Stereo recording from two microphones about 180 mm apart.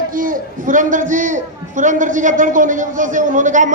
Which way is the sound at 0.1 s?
50° right (ahead or behind).